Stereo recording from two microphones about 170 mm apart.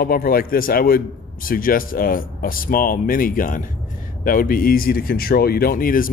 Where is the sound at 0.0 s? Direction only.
60° left (ahead or behind).